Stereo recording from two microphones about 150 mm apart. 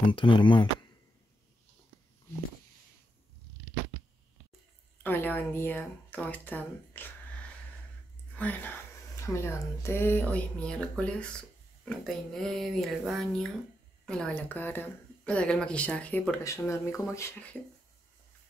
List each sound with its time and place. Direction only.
0.0 s speech: 35° left (ahead or behind)
5.0 s speech: 15° left (ahead or behind)